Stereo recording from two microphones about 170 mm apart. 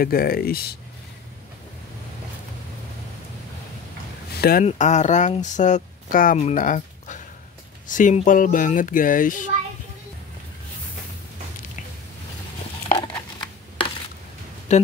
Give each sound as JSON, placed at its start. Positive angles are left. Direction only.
{"t": 0.0, "sound": "speech", "side_deg": 60}
{"t": 4.4, "sound": "speech", "side_deg": 60}
{"t": 4.6, "sound": "speech", "side_deg": 45}
{"t": 12.9, "sound": "a sound", "side_deg": 25}
{"t": 14.7, "sound": "speech", "side_deg": 45}